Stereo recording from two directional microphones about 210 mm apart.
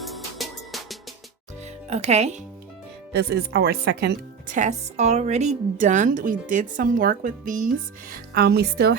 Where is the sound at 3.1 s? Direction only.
50° right (ahead or behind).